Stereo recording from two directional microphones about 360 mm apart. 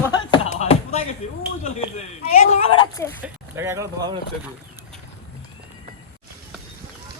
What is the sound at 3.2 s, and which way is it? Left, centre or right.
Speech, centre.